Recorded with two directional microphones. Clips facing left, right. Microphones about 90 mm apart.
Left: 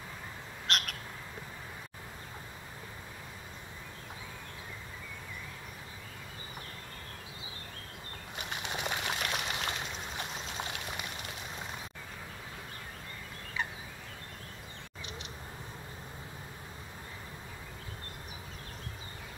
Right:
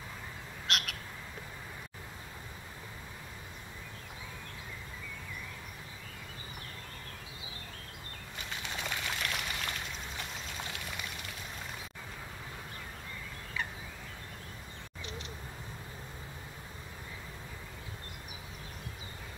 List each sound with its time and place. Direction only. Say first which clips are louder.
0.7 s bird: left 1 dB; centre (ahead or behind)
8.4 s a sound: left 2 dB; 20° left (ahead or behind)
13.6 s turkey: left 2 dB; 20° left (ahead or behind)
15.0 s bird: right 2 dB; 20° left (ahead or behind)